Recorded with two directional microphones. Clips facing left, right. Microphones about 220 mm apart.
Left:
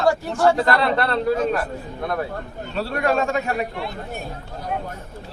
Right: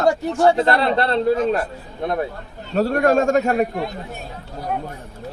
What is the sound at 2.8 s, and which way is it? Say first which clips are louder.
A man's voice: right 5 dB; 45° right (ahead or behind).